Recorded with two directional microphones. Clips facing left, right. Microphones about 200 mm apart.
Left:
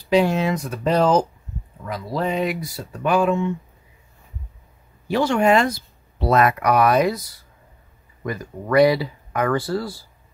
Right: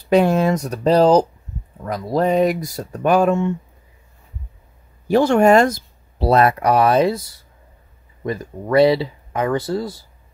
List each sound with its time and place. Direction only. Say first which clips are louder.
0.1 s speech: right 3 dB; 50° right (ahead or behind)
5.0 s speech: right 5 dB; 45° right (ahead or behind); by 10.0 s 20° right (ahead or behind)